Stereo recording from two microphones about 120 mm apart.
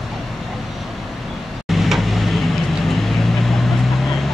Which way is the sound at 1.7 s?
Centre (ahead or behind).